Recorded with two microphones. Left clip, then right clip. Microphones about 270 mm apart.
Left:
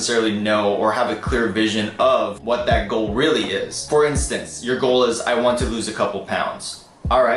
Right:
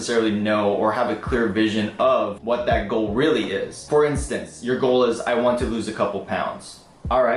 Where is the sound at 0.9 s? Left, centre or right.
Centre.